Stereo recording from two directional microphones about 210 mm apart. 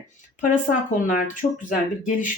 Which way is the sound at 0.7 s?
40° left (ahead or behind).